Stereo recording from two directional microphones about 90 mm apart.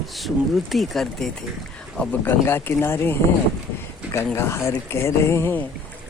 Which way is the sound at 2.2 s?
25° left (ahead or behind).